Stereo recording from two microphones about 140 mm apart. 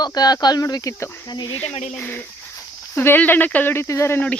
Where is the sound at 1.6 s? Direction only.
50° left (ahead or behind).